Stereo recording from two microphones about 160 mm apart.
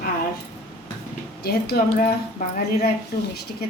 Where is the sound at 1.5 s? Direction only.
75° left (ahead or behind).